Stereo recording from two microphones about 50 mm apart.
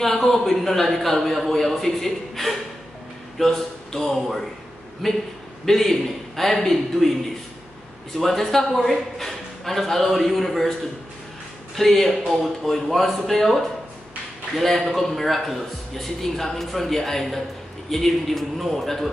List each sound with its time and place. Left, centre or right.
0.0 s a man's voice: centre
8.2 s a man's voice: centre
11.7 s a man's voice: centre